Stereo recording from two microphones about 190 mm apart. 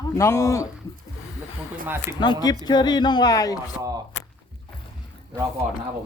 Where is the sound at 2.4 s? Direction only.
20° left (ahead or behind).